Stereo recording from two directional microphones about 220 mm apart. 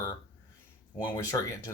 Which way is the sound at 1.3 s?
15° left (ahead or behind).